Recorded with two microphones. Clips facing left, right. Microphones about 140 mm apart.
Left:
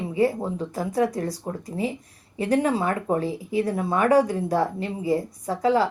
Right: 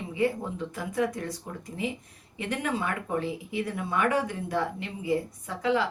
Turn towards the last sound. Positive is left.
turn(degrees=40)  # may be behind; listen again after turning